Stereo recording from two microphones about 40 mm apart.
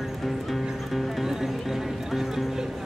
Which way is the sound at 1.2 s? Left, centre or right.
Centre.